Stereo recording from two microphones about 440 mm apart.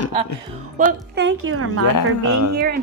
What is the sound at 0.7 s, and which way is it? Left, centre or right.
Speech, right.